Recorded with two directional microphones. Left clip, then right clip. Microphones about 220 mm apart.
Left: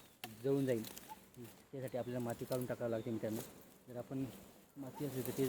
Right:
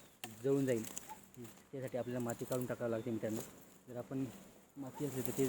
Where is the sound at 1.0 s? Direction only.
25° right (ahead or behind).